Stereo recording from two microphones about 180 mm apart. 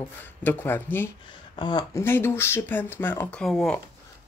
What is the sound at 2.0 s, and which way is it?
Speech, 10° left (ahead or behind).